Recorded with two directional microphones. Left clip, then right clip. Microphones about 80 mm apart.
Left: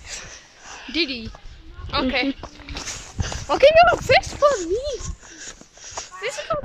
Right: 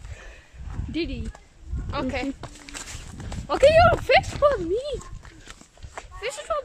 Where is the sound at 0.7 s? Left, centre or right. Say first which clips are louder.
Left 7 dB; left.